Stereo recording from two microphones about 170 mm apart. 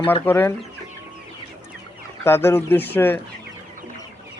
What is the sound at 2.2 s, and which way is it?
Speech, 15° left (ahead or behind).